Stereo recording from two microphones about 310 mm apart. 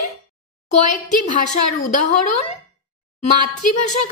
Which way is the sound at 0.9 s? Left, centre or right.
Left.